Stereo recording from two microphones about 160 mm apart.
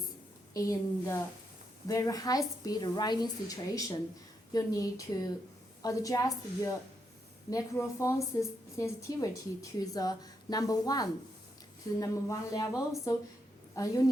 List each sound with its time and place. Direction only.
0.5 s a woman's voice: 20° left (ahead or behind)